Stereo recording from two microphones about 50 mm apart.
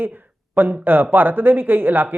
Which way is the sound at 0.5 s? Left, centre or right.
Right.